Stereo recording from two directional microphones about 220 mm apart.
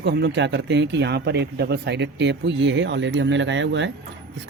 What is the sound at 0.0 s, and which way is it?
Speech, 50° right (ahead or behind).